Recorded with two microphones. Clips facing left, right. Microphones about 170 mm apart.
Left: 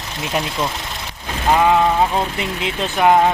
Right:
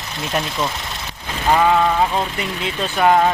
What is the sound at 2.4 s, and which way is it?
Speech, 20° left (ahead or behind).